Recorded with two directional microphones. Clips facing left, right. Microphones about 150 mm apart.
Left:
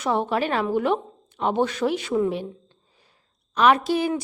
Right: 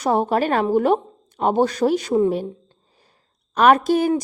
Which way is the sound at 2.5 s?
40° right (ahead or behind).